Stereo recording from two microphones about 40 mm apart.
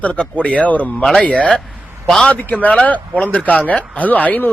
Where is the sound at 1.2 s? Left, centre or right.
Left.